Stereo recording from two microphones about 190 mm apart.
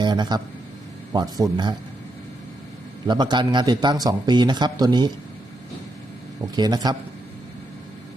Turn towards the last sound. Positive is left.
turn(degrees=-20)  # may be behind; listen again after turning